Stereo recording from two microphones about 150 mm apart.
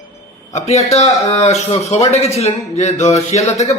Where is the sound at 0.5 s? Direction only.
50° left (ahead or behind).